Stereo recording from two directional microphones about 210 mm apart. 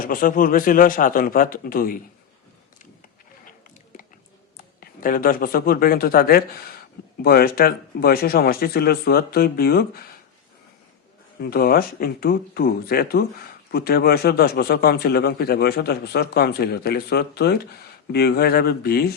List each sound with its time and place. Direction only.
0.0 s speech: 40° left (ahead or behind)
4.5 s a man's voice: 40° left (ahead or behind)
11.3 s speech: 45° left (ahead or behind)